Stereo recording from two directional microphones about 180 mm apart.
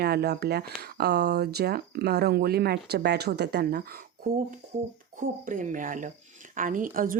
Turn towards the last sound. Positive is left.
turn(degrees=-50)  # may be behind; listen again after turning